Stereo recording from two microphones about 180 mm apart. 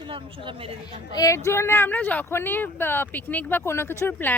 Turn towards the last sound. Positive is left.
turn(degrees=10)  # may be behind; listen again after turning